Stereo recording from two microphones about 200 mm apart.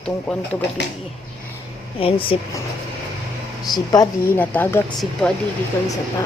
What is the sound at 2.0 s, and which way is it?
Speech, 25° left (ahead or behind).